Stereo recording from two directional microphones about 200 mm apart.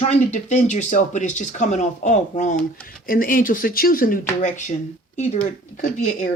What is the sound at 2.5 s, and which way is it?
Speech, 5° left (ahead or behind).